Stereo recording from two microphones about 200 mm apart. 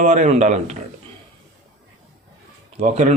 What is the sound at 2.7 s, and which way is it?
Speech, 35° right (ahead or behind).